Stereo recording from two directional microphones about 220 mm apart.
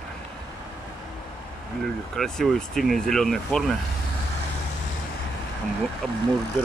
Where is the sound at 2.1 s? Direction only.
Centre (ahead or behind).